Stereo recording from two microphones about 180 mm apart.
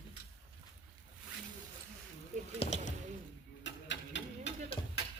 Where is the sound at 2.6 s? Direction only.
40° left (ahead or behind).